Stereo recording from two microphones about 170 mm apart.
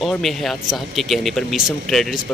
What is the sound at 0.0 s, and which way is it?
Speech, centre (ahead or behind).